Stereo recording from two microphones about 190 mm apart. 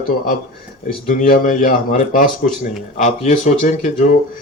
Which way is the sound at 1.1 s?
45° left (ahead or behind).